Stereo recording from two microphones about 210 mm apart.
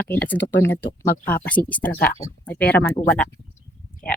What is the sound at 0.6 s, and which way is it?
Speech, 10° left (ahead or behind).